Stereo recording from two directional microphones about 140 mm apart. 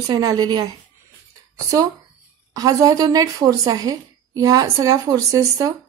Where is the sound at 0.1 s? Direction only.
30° right (ahead or behind).